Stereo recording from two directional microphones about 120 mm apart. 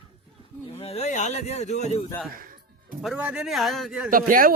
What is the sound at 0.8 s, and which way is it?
Speech, 60° left (ahead or behind).